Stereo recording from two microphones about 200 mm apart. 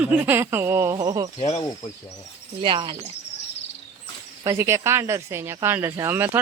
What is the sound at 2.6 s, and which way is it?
Speech, 25° right (ahead or behind).